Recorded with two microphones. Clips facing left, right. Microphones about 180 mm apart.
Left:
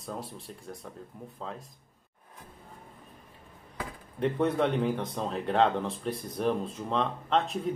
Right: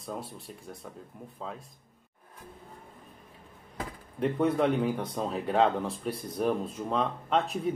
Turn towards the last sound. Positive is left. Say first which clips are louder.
# even
turn(degrees=-5)  # may be behind; listen again after turning